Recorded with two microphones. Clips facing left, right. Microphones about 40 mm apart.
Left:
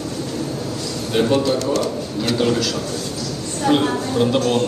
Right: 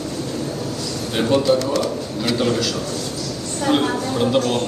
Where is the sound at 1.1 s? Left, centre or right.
Centre.